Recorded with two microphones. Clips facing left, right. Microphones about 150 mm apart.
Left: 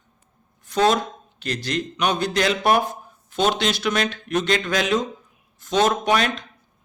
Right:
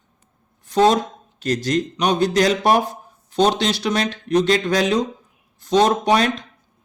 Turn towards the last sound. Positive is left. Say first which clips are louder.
# right 3 dB
turn(degrees=-35)  # may be behind; listen again after turning